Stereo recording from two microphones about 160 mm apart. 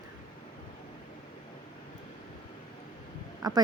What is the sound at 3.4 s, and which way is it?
Speech, 25° right (ahead or behind).